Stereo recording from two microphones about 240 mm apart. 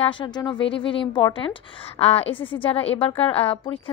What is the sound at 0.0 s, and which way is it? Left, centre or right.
A woman's voice, left.